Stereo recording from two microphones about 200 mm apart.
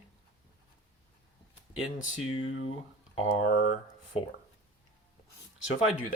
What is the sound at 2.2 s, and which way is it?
Speech, 90° left.